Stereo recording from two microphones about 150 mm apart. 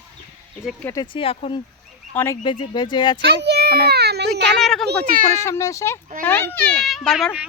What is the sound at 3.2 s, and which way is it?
A child's voice, 90° right.